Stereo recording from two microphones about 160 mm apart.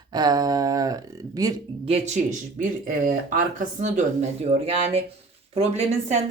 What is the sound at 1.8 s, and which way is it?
Speech, 45° right (ahead or behind).